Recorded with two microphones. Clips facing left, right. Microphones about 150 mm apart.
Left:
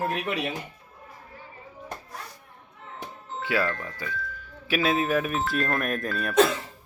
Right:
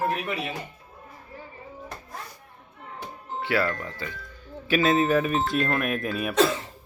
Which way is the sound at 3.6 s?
15° right (ahead or behind).